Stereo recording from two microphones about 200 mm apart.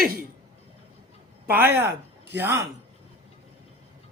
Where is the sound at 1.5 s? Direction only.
10° right (ahead or behind).